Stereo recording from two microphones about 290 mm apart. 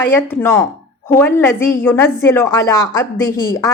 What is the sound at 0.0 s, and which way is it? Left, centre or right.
A woman's voice, centre.